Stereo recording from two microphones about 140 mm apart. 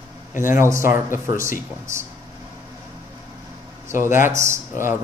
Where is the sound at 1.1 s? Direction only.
70° left (ahead or behind).